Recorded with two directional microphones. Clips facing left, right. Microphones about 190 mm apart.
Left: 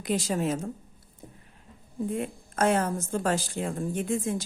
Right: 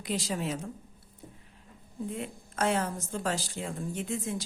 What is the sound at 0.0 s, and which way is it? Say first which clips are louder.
Speech: left 5 dB; 50° left (ahead or behind).